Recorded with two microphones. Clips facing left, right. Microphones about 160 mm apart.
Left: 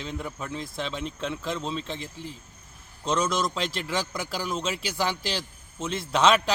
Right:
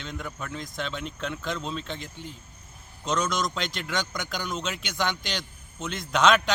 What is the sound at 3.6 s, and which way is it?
A man's voice, 30° left (ahead or behind).